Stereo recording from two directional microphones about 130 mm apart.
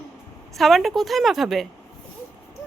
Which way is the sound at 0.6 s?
Centre (ahead or behind).